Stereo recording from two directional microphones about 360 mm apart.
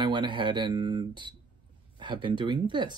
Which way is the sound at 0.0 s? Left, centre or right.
Centre.